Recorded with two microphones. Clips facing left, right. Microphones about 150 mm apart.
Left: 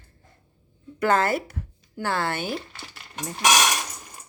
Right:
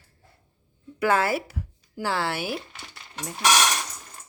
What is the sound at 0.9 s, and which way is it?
Speech, 5° right (ahead or behind).